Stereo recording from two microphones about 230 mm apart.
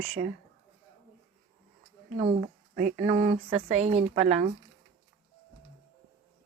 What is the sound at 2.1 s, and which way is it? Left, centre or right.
Speech, right.